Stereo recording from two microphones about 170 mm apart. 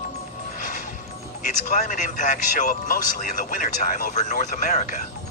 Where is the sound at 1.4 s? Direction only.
50° left (ahead or behind).